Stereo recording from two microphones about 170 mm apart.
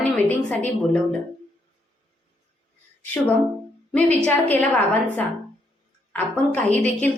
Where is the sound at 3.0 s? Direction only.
10° left (ahead or behind).